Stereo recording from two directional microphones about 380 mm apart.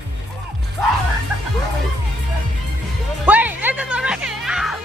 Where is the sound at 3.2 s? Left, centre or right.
Centre.